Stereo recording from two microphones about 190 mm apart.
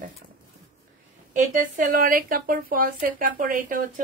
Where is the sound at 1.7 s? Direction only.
45° right (ahead or behind).